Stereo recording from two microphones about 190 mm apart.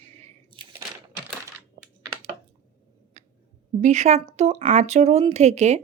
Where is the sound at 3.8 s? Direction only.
35° right (ahead or behind).